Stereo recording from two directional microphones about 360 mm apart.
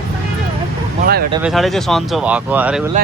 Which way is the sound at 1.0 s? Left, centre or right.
Right.